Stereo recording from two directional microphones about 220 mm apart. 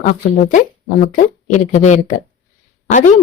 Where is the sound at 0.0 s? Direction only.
40° left (ahead or behind).